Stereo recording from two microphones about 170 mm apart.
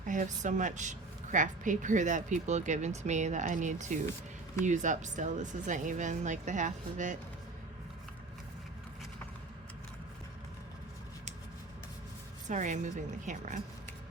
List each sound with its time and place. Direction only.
0.1 s speech: 45° right (ahead or behind)
12.5 s speech: 45° right (ahead or behind)